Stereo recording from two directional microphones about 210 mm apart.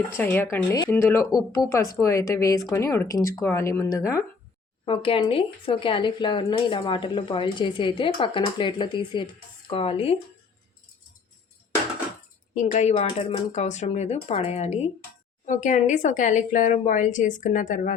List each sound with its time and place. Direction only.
0.1 s a woman's voice: 10° left (ahead or behind); by 10.2 s 25° left (ahead or behind)
12.5 s speech: 35° left (ahead or behind)